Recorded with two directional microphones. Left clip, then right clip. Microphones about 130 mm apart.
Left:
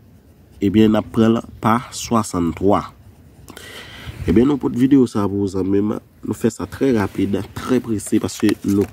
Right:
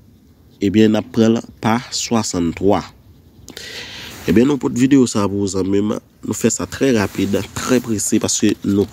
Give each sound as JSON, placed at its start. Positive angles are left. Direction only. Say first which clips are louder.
{"t": 0.6, "sound": "speech", "louder": "right 1 dB", "side_deg": 20}
{"t": 3.4, "sound": "a sound", "louder": "right 5 dB", "side_deg": 20}
{"t": 4.3, "sound": "speech", "louder": "right 1 dB", "side_deg": -5}